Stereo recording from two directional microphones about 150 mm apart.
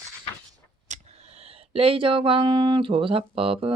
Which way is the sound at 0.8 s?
50° right (ahead or behind).